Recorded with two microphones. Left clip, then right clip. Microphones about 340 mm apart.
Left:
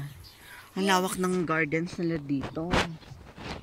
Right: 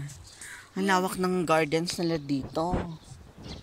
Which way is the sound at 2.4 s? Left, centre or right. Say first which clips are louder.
Left 1 dB; left.